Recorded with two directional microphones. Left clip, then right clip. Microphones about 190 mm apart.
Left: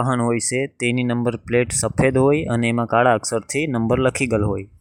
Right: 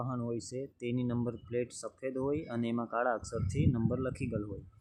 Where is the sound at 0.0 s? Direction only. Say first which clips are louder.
Left 18 dB; 45° left (ahead or behind).